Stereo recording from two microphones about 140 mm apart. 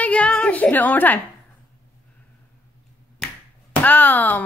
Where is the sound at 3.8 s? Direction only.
10° left (ahead or behind).